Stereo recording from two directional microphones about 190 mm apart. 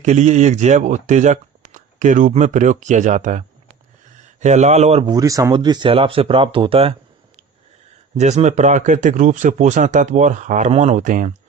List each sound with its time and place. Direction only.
0.0 s speech: 40° right (ahead or behind)
5.1 s speech: 15° right (ahead or behind)
8.1 s speech: 35° right (ahead or behind)